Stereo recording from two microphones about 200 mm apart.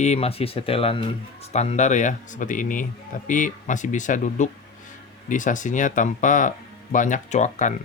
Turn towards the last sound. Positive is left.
turn(degrees=35)  # may be behind; listen again after turning